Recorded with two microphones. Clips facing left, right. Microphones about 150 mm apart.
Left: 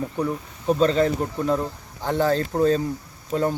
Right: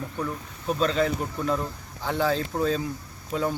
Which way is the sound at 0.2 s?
20° left (ahead or behind).